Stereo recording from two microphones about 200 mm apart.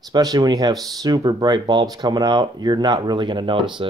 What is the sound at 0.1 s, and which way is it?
Speech, 20° right (ahead or behind).